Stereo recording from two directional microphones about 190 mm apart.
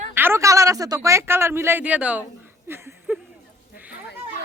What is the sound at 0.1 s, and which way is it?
Speech, 10° right (ahead or behind).